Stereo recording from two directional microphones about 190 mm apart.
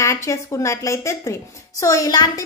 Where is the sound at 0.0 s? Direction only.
15° left (ahead or behind).